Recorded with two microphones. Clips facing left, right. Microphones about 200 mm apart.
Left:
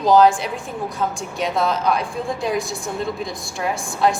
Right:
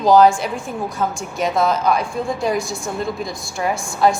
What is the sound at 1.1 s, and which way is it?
Speech, 45° right (ahead or behind).